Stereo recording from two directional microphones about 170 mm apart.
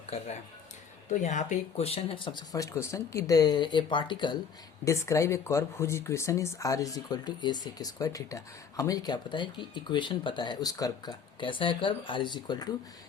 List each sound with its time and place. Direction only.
0.1 s speech: 40° left (ahead or behind)
4.9 s speech: 15° left (ahead or behind)